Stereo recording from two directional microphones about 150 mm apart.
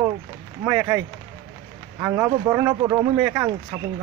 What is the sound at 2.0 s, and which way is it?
Speech, 20° right (ahead or behind).